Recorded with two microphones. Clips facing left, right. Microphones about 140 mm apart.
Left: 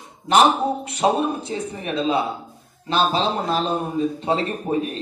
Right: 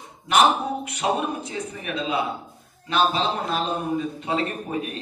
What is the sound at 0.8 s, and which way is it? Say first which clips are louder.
A man's voice: left 6 dB; 30° left (ahead or behind).